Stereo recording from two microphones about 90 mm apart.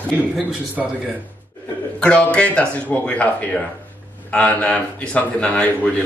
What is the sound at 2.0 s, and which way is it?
A man's voice, 15° left (ahead or behind).